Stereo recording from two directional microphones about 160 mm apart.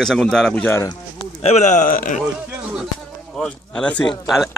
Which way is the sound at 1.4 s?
45° left (ahead or behind).